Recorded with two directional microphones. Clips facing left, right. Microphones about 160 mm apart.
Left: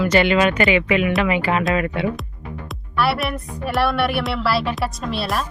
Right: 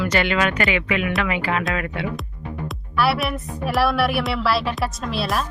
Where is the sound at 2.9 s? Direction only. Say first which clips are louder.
Even; centre (ahead or behind).